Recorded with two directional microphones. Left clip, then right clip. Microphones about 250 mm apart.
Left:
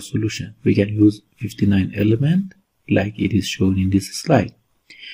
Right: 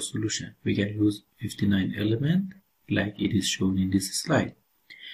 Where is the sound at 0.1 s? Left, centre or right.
Left.